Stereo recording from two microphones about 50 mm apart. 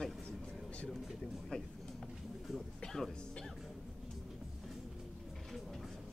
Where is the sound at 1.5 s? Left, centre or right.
Centre.